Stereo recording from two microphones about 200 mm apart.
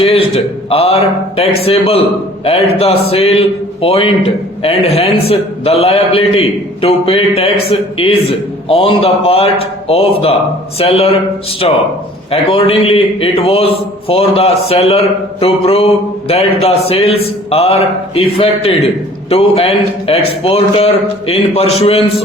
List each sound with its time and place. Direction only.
0.0 s a man's voice: 30° left (ahead or behind)